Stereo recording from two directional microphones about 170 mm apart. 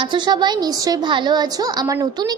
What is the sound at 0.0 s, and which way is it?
A woman's voice, 25° right (ahead or behind).